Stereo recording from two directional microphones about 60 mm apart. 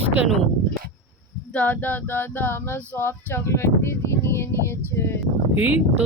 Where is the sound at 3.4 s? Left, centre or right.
Left.